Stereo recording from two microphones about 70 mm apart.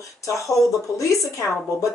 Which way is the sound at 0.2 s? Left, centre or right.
Left.